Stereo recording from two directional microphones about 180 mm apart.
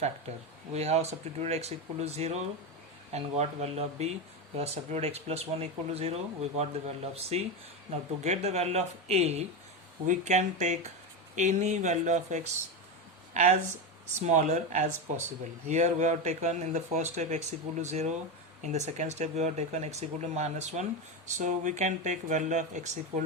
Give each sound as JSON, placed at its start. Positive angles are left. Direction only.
{"t": 0.7, "sound": "speech", "side_deg": -35}